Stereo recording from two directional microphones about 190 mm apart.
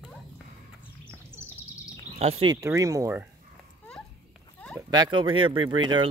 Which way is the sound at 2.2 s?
35° right (ahead or behind).